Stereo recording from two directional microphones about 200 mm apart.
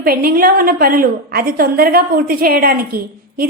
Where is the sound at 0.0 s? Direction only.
45° right (ahead or behind).